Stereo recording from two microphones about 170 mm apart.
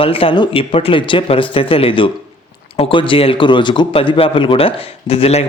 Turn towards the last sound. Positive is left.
turn(degrees=35)  # may be behind; listen again after turning